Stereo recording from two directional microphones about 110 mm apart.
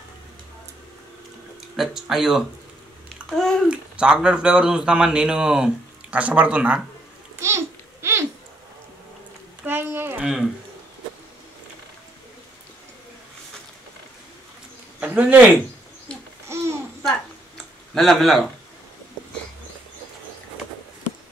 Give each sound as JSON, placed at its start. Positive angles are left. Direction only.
{"t": 1.8, "sound": "a child's voice", "side_deg": -5}
{"t": 3.6, "sound": "speech", "side_deg": -10}
{"t": 7.3, "sound": "babbling", "side_deg": -25}
{"t": 9.7, "sound": "a sound", "side_deg": -20}
{"t": 10.2, "sound": "speech", "side_deg": -5}
{"t": 15.0, "sound": "speech", "side_deg": -15}
{"t": 16.4, "sound": "babbling", "side_deg": -25}
{"t": 17.6, "sound": "a sound", "side_deg": 5}